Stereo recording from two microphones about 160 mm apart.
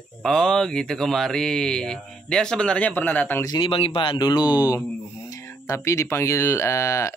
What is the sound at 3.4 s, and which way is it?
Speech, 30° left (ahead or behind).